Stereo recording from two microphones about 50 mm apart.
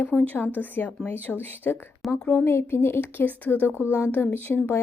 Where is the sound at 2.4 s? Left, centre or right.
Left.